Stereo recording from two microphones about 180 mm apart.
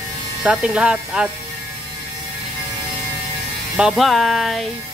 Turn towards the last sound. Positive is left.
turn(degrees=0)  # may be behind; listen again after turning